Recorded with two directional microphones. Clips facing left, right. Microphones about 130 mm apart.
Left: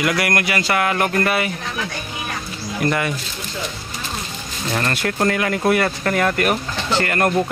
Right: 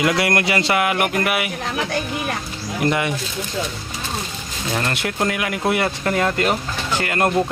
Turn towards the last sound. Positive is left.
turn(degrees=-15)  # may be behind; listen again after turning